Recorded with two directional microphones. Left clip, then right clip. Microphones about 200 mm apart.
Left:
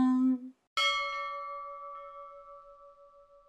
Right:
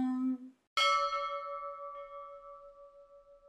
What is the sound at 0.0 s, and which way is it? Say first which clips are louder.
Ding: left 7 dB; 40° left (ahead or behind).